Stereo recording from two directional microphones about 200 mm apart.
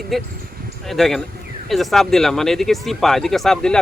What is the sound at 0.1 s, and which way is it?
Speech, centre (ahead or behind).